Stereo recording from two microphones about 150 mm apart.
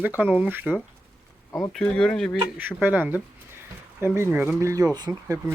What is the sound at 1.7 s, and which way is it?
Speech, 5° left (ahead or behind).